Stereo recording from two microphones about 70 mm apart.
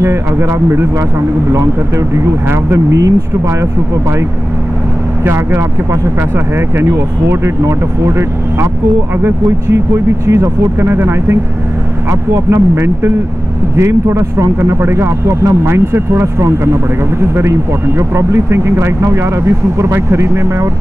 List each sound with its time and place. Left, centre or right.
0.0 s speech: right
5.2 s speech: right
10.8 s speech: right